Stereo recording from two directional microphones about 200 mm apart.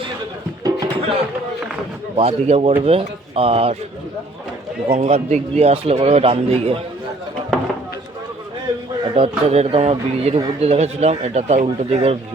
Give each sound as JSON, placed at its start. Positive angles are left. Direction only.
{"t": 0.6, "sound": "music", "side_deg": -20}
{"t": 2.1, "sound": "speech", "side_deg": -30}
{"t": 4.9, "sound": "a man's voice", "side_deg": -35}
{"t": 9.1, "sound": "a man's voice", "side_deg": -30}